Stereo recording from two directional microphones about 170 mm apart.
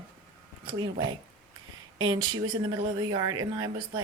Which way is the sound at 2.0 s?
25° right (ahead or behind).